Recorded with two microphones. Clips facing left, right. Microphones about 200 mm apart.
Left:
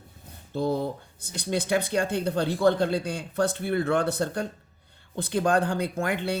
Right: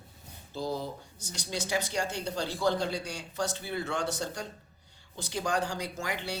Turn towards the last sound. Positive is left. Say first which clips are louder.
# left 8 dB
turn(degrees=55)  # may be behind; listen again after turning